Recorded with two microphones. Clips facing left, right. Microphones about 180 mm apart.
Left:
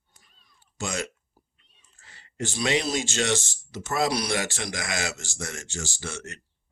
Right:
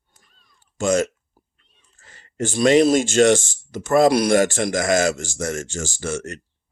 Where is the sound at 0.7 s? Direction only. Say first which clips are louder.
Right 13 dB; 45° right (ahead or behind).